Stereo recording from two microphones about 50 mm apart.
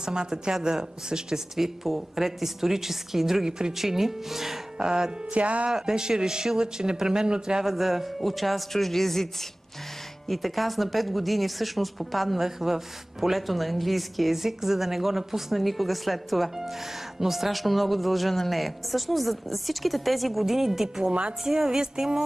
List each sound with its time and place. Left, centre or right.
0.0 s speech: centre
4.7 s music: centre
5.7 s speech: centre
21.1 s music: right
21.5 s speech: centre